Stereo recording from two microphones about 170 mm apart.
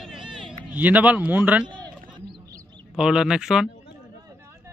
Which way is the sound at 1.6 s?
30° right (ahead or behind).